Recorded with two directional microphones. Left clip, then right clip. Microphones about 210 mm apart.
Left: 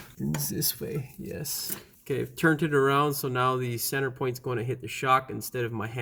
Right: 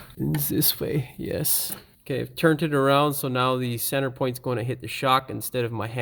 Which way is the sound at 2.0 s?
25° right (ahead or behind).